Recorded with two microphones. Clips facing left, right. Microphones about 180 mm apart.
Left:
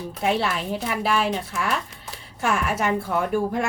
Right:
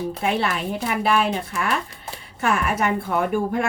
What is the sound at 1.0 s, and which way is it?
Speech, 55° right (ahead or behind).